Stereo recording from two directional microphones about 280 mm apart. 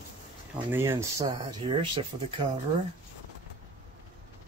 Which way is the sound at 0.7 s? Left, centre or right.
Centre.